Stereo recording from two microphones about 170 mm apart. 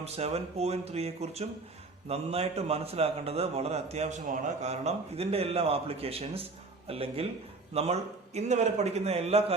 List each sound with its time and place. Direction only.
0.0 s a man's voice: 35° right (ahead or behind)